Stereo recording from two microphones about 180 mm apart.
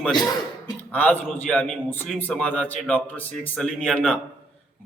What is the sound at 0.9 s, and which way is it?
A man's voice, 10° left (ahead or behind).